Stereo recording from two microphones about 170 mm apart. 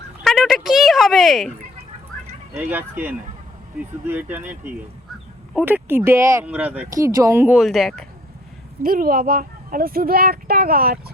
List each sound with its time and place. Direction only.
0.3 s a sound: centre (ahead or behind)
2.6 s speech: 10° right (ahead or behind)
5.5 s speech: 10° right (ahead or behind)
7.6 s speech: centre (ahead or behind)
8.8 s speech: 55° right (ahead or behind)